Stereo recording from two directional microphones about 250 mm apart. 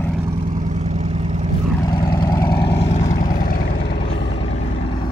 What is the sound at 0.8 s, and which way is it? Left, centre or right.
Vehicle, right.